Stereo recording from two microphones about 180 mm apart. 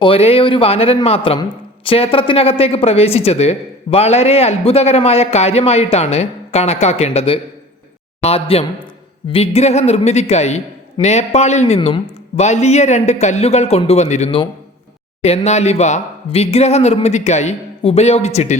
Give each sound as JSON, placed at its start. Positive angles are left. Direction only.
{"t": 0.0, "sound": "a man's voice", "side_deg": 30}
{"t": 15.4, "sound": "a man's voice", "side_deg": 35}